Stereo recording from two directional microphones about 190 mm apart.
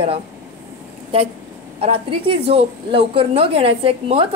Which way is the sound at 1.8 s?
30° right (ahead or behind).